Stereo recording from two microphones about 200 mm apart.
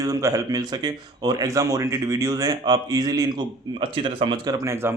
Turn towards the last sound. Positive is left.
turn(degrees=-10)  # may be behind; listen again after turning